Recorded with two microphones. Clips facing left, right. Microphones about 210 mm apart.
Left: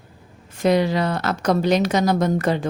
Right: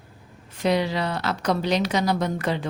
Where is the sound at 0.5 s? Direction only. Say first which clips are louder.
Left 4 dB; 45° left (ahead or behind).